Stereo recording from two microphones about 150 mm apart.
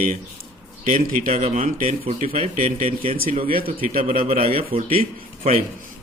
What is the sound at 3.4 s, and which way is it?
Speech, 75° right (ahead or behind).